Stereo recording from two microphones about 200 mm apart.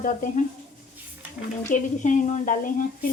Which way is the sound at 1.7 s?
40° left (ahead or behind).